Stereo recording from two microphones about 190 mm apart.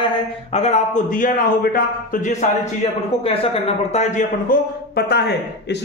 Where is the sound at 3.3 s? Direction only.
30° left (ahead or behind).